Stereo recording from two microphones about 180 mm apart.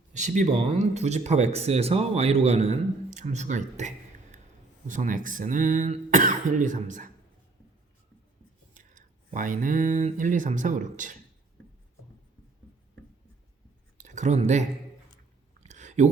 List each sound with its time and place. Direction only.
0.1 s speech: 40° right (ahead or behind)
8.7 s speech: 45° right (ahead or behind)
14.0 s speech: 40° right (ahead or behind)
15.6 s a sound: 40° right (ahead or behind)